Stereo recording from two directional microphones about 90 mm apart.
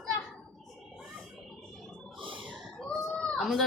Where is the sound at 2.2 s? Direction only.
70° right (ahead or behind).